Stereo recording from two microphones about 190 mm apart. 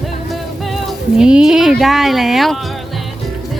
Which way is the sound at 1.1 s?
5° right (ahead or behind).